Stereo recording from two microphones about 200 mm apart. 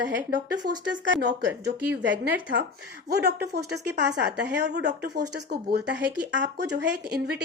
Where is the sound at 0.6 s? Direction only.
50° right (ahead or behind).